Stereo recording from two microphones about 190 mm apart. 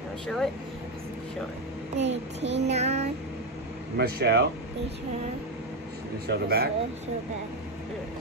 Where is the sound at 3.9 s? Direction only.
60° right (ahead or behind).